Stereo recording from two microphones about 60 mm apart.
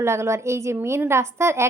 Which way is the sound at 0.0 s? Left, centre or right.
Right.